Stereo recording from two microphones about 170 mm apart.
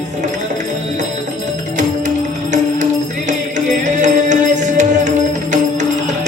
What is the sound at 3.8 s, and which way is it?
Music, 45° right (ahead or behind).